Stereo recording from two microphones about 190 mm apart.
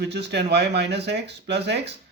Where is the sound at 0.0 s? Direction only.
65° right (ahead or behind).